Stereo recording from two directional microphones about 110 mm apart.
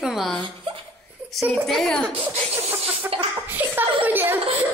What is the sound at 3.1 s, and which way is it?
Laughter, 60° right (ahead or behind).